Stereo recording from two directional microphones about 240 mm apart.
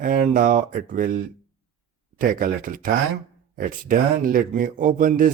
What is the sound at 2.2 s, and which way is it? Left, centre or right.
Speech, right.